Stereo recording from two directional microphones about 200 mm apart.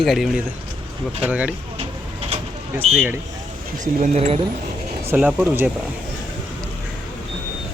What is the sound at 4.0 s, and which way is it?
Speech, 30° right (ahead or behind).